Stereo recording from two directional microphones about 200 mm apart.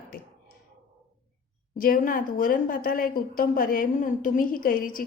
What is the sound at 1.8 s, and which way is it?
A woman's voice, 45° left (ahead or behind).